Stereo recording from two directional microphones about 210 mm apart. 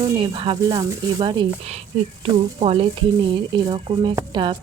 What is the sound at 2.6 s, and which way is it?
Speech, 30° right (ahead or behind).